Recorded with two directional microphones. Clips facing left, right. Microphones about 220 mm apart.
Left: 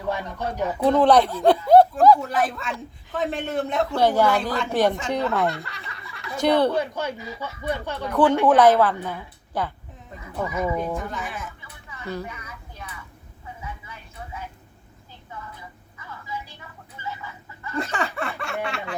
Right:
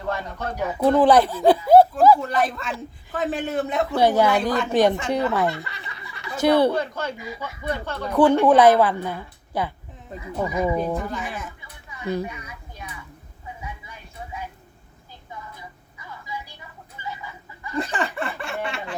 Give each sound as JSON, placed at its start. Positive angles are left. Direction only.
{"t": 0.1, "sound": "speech", "side_deg": 15}
{"t": 0.5, "sound": "a woman's voice", "side_deg": -10}
{"t": 6.7, "sound": "speech", "side_deg": 15}
{"t": 7.2, "sound": "a woman's voice", "side_deg": -15}
{"t": 7.7, "sound": "speech", "side_deg": 15}
{"t": 8.1, "sound": "a woman's voice", "side_deg": -10}
{"t": 10.8, "sound": "speech", "side_deg": 0}
{"t": 11.9, "sound": "a sound", "side_deg": -15}
{"t": 16.0, "sound": "vehicle", "side_deg": -15}
{"t": 17.0, "sound": "chicken", "side_deg": -15}
{"t": 17.9, "sound": "snicker", "side_deg": 0}